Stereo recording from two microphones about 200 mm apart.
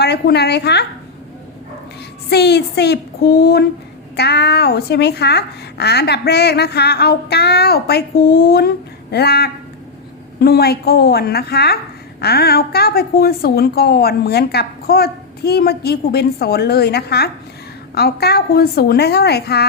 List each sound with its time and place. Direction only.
0.0 s speech: 55° left (ahead or behind)
2.3 s a woman's voice: 55° left (ahead or behind)